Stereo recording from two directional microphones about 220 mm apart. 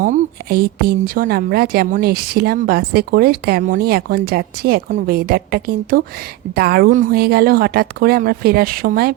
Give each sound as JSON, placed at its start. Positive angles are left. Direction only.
{"t": 0.0, "sound": "a woman's voice", "side_deg": -40}